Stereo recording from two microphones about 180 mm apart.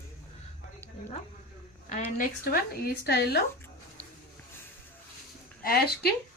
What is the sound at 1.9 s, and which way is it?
A woman's voice, 55° left (ahead or behind).